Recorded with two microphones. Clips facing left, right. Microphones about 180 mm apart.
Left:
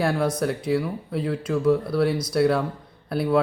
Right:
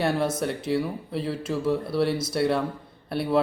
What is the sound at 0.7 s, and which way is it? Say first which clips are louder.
Speech: left 2 dB; centre (ahead or behind).